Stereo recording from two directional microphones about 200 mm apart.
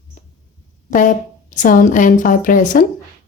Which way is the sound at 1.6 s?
40° left (ahead or behind).